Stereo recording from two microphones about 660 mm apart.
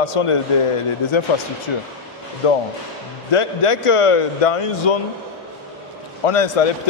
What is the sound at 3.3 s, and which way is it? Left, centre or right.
A man's voice, left.